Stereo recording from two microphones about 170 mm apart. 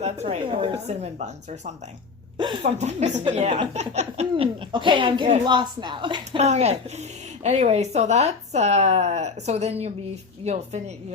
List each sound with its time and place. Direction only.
0.0 s a woman's voice: 40° right (ahead or behind)
2.4 s speech: 25° right (ahead or behind)
2.7 s a woman's voice: 40° right (ahead or behind)
6.4 s a woman's voice: 40° right (ahead or behind)